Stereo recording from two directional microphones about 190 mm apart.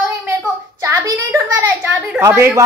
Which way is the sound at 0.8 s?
15° right (ahead or behind).